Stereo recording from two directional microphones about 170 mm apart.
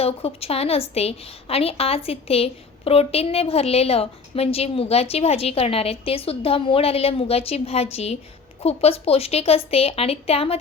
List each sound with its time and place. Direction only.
0.0 s a woman's voice: 35° left (ahead or behind)